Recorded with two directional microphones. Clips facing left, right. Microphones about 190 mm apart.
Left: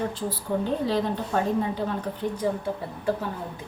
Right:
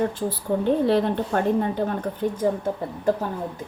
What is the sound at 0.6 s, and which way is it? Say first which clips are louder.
A woman's voice: right 7 dB; 60° right (ahead or behind).